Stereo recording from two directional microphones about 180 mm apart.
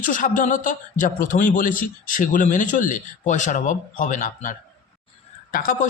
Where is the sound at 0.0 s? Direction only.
45° left (ahead or behind).